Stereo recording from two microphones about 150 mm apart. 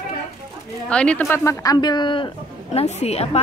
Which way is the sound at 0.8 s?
5° left (ahead or behind).